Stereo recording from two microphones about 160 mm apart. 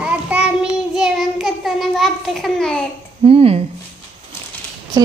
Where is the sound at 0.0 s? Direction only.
5° right (ahead or behind).